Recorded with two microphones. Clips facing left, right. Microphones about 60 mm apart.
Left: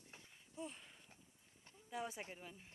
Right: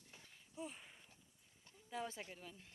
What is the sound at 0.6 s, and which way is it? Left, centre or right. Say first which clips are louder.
Speech: even; right.